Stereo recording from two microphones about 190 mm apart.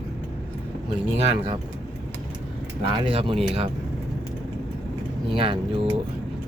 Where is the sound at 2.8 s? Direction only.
30° right (ahead or behind).